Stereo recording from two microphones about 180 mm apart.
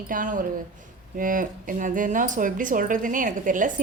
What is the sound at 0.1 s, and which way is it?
A woman's voice, 50° right (ahead or behind).